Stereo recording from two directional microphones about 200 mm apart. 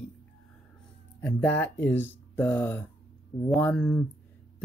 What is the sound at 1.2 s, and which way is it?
Speech, 10° left (ahead or behind).